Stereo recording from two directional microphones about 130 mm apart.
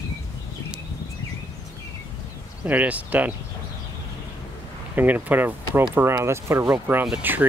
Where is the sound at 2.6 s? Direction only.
10° right (ahead or behind).